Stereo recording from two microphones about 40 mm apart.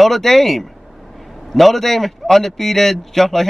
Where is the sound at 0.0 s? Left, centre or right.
Centre.